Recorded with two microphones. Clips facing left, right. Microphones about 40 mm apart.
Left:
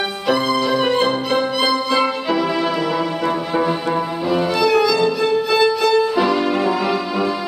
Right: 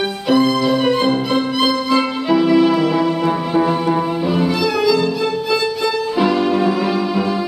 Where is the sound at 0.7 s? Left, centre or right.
Centre.